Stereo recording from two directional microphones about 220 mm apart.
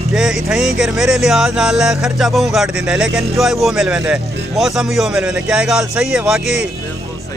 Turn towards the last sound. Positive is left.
turn(degrees=-5)  # may be behind; listen again after turning